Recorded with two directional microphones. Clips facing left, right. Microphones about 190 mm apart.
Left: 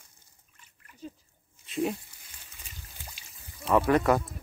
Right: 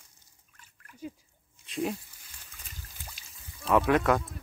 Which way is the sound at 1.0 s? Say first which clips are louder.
Right 2 dB; 10° right (ahead or behind).